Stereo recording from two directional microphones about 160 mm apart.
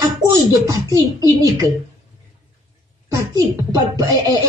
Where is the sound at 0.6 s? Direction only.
20° right (ahead or behind).